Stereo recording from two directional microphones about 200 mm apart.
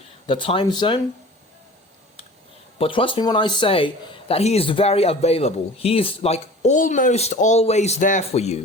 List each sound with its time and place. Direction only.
0.3 s speech: 25° left (ahead or behind)
2.7 s speech: 25° left (ahead or behind)